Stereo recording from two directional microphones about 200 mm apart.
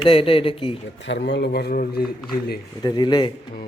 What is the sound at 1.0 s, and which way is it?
Speech, 60° left (ahead or behind).